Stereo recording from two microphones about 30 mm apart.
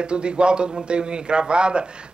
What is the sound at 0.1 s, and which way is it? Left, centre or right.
Speech, right.